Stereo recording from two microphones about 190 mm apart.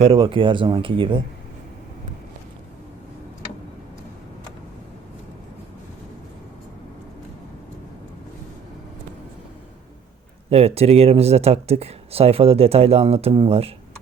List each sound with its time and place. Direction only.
0.0 s speech: 30° right (ahead or behind)
10.5 s speech: 30° right (ahead or behind)